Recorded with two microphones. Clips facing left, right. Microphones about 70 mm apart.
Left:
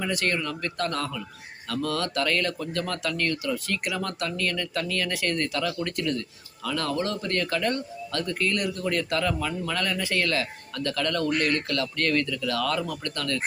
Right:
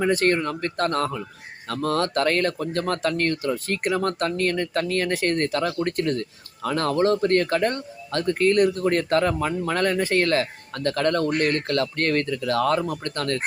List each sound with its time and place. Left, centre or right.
0.0 s speech: right